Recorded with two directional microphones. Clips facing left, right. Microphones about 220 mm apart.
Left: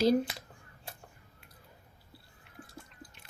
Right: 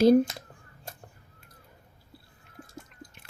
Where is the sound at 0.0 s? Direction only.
50° right (ahead or behind).